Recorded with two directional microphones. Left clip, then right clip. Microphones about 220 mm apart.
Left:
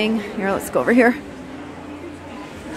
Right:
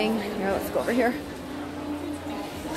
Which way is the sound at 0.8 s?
30° left (ahead or behind).